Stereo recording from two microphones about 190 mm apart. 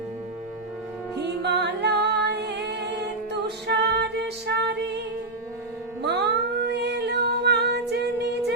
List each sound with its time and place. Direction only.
1.4 s music: 60° right (ahead or behind)
6.0 s music: 60° right (ahead or behind)